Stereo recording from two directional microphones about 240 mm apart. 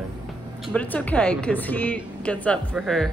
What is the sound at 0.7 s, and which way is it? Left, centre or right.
A woman's voice, centre.